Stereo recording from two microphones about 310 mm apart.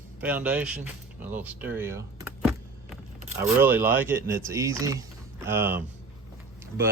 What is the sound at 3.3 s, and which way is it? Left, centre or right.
Speech, centre.